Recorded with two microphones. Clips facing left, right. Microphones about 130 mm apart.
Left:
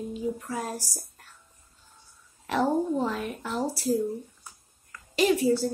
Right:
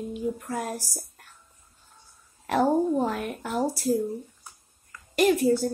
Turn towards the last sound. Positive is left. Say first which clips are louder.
# right 2 dB
turn(degrees=-50)  # may be behind; listen again after turning